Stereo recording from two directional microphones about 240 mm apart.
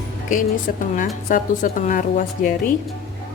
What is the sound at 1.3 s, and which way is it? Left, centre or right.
A woman's voice, left.